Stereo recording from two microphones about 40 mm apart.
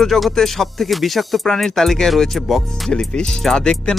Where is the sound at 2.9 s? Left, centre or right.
Left.